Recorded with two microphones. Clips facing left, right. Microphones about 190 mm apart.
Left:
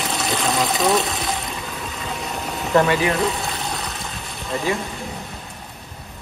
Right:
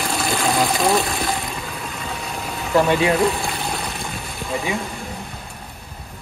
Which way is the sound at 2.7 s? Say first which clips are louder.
Even; 5° right (ahead or behind).